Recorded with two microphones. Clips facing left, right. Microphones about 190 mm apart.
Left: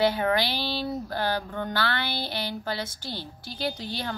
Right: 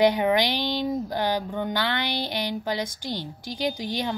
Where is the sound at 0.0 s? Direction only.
15° right (ahead or behind).